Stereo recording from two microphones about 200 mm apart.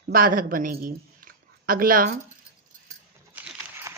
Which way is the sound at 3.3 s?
10° right (ahead or behind).